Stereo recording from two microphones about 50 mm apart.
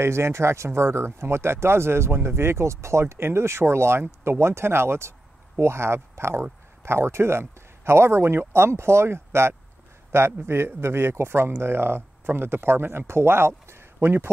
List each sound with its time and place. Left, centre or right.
0.0 s speech: right
14.0 s a man's voice: right